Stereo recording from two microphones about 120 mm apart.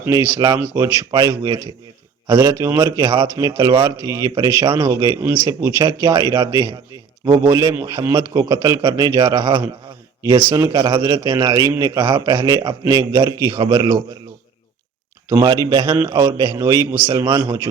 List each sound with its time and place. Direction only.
0.1 s a man's voice: 25° right (ahead or behind)
4.6 s a man's voice: 40° right (ahead or behind)
4.9 s a man's voice: 30° right (ahead or behind)
15.3 s a man's voice: 30° right (ahead or behind)